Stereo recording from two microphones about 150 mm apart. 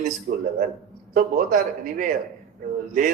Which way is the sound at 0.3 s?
60° right (ahead or behind).